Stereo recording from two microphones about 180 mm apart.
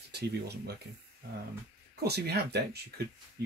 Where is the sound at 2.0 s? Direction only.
65° right (ahead or behind).